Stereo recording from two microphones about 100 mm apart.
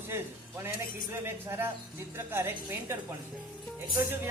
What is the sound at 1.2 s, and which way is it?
A man's voice, 25° right (ahead or behind).